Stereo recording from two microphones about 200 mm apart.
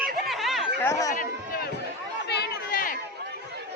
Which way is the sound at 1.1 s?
45° left (ahead or behind).